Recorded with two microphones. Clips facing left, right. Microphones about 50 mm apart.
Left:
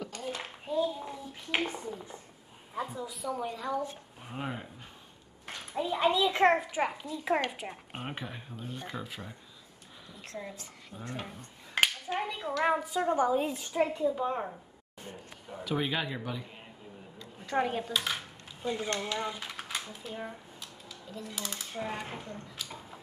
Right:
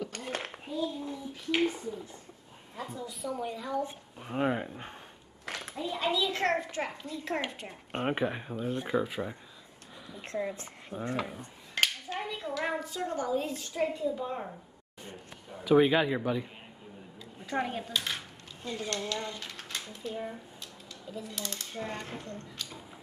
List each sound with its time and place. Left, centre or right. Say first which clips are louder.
0.1 s a sound: right 1 dB; right
0.7 s a child's voice: left 3 dB; left
2.7 s a woman's voice: left 3 dB; centre
4.3 s speech: right 8 dB; centre
5.4 s a sound: right 4 dB; right
6.1 s speech: left 4 dB; centre
8.0 s speech: right 10 dB; right
8.5 s speech: right 10 dB; centre
10.2 s speech: right 7 dB; right
11.7 s a sound: left 2 dB; centre
12.3 s speech: left 5 dB; centre
15.6 s speech: right 9 dB; centre
17.4 s a sound: left 3 dB; centre
18.7 s speech: left 2 dB; centre